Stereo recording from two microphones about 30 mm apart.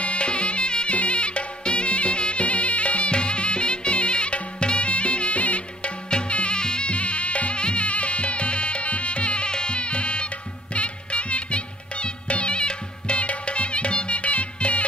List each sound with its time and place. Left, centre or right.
0.0 s music: left
2.4 s music: left
3.2 s music: left
6.0 s music: left
6.9 s insect: left
13.2 s music: left